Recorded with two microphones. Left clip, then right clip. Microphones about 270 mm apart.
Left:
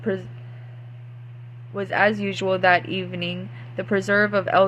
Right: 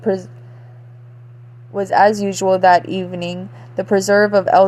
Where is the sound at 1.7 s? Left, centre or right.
Centre.